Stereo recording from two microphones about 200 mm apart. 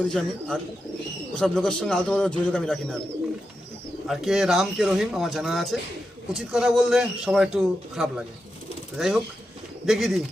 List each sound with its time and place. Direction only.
0.0 s a man's voice: 5° left (ahead or behind)
4.0 s a man's voice: centre (ahead or behind)
9.8 s a man's voice: centre (ahead or behind)